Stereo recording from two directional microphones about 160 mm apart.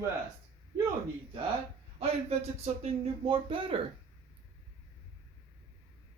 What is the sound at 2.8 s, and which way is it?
Speech, 35° right (ahead or behind).